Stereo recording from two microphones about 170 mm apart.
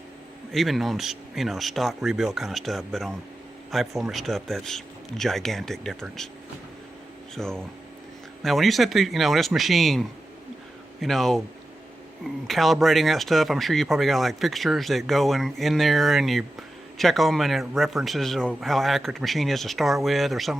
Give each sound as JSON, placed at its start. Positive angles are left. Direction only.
{"t": 0.5, "sound": "speech", "side_deg": 0}
{"t": 7.3, "sound": "speech", "side_deg": 5}